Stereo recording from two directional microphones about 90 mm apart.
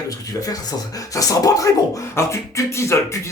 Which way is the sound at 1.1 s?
40° left (ahead or behind).